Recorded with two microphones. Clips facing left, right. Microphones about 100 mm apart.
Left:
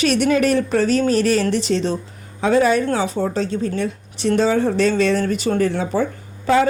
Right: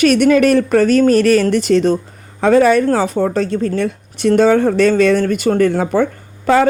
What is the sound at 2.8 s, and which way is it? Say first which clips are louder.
A woman's voice: right 5 dB; 50° right (ahead or behind).